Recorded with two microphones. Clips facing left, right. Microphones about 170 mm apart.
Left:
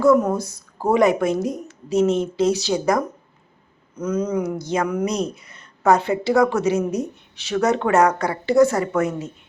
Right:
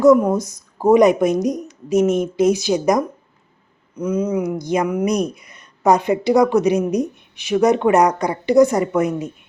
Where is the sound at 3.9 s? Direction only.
10° right (ahead or behind).